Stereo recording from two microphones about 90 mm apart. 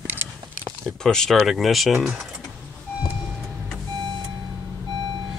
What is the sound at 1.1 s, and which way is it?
Speech, 5° left (ahead or behind).